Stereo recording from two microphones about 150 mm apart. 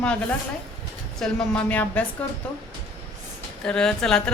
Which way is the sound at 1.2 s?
5° left (ahead or behind).